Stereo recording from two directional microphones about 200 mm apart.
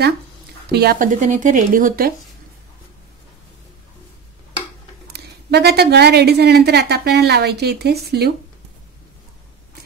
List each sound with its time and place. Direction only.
0.7 s speech: 50° right (ahead or behind)
5.1 s a woman's voice: 55° right (ahead or behind)